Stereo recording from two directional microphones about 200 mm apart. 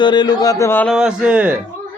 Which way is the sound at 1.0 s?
5° right (ahead or behind).